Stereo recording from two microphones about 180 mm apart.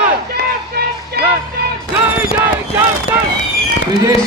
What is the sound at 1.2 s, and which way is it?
Music, 65° right (ahead or behind).